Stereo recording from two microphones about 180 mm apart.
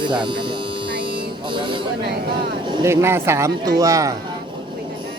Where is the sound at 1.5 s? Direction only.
25° right (ahead or behind).